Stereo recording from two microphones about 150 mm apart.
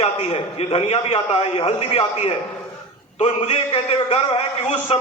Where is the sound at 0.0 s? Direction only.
40° left (ahead or behind).